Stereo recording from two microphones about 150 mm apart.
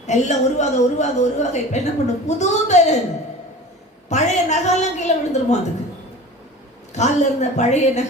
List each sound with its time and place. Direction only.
0.1 s a woman's voice: 50° left (ahead or behind)
4.1 s a woman's voice: 50° left (ahead or behind)
6.9 s a woman's voice: 50° left (ahead or behind)